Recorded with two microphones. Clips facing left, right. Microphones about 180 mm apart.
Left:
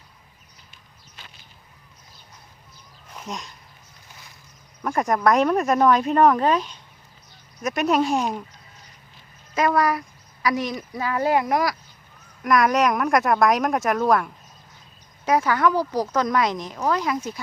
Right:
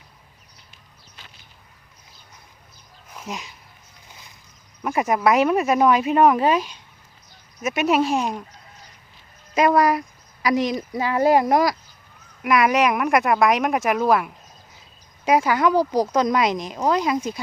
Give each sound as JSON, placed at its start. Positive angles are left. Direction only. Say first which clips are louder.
{"t": 3.2, "sound": "speech", "louder": "right 1 dB", "side_deg": 0}
{"t": 4.8, "sound": "speech", "louder": "right 1 dB", "side_deg": -5}
{"t": 9.6, "sound": "speech", "louder": "right 3 dB", "side_deg": -20}
{"t": 11.2, "sound": "speech", "louder": "right 4 dB", "side_deg": -35}
{"t": 12.4, "sound": "speech", "louder": "right 1 dB", "side_deg": -5}